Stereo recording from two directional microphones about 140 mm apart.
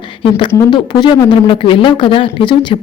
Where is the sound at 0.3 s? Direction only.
35° left (ahead or behind).